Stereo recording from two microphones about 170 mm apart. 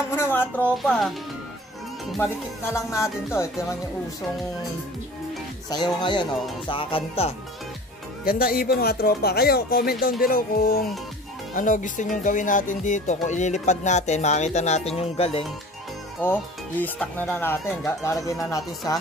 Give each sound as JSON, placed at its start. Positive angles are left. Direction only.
{"t": 0.1, "sound": "speech", "side_deg": 15}
{"t": 2.1, "sound": "speech", "side_deg": 15}
{"t": 5.7, "sound": "speech", "side_deg": 25}
{"t": 8.3, "sound": "speech", "side_deg": 60}
{"t": 16.2, "sound": "speech", "side_deg": 10}